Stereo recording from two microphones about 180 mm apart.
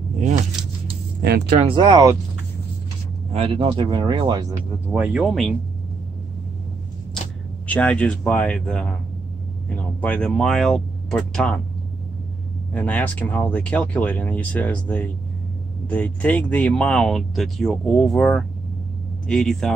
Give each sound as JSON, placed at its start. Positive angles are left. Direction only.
{"t": 1.2, "sound": "speech", "side_deg": -60}
{"t": 1.7, "sound": "speech", "side_deg": -25}
{"t": 3.3, "sound": "speech", "side_deg": -35}
{"t": 4.8, "sound": "speech", "side_deg": -10}
{"t": 7.6, "sound": "speech", "side_deg": 5}
{"t": 12.7, "sound": "speech", "side_deg": 5}